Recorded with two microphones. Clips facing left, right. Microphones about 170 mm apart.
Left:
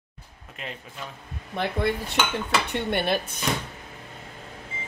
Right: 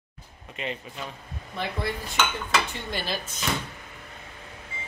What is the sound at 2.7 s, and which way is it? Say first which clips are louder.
Dishes: left 7 dB; 60° left (ahead or behind).